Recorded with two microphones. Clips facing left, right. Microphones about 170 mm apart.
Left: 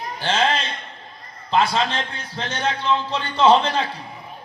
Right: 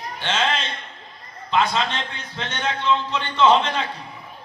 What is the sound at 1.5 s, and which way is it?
A man's voice, 35° left (ahead or behind).